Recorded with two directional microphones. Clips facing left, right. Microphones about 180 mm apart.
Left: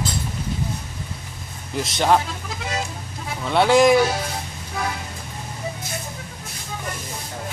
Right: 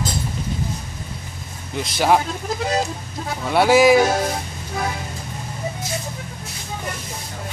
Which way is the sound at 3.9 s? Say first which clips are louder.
Right 2 dB; 45° right (ahead or behind).